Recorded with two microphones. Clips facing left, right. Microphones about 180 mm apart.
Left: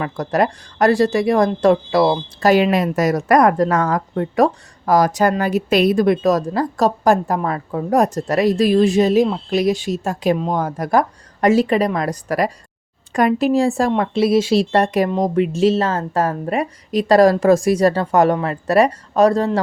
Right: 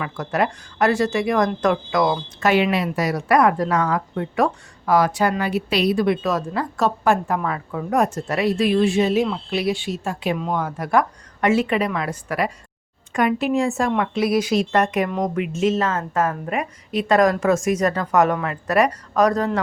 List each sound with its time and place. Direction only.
0.0 s speech: 40° left (ahead or behind)